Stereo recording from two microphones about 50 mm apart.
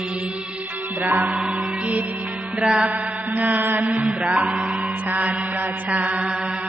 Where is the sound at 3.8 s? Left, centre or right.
Right.